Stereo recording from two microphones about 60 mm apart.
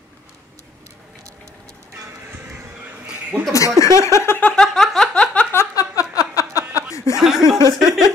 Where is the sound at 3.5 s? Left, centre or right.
Left.